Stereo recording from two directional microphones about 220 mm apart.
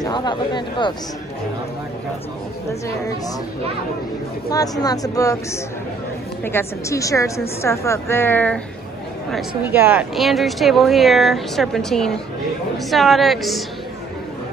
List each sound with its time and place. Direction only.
0.0 s speech: 20° left (ahead or behind)
4.5 s a woman's voice: 15° left (ahead or behind)
9.7 s speech: 10° right (ahead or behind)